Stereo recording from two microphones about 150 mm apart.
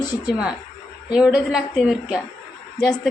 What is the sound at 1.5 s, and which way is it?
Speech, centre (ahead or behind).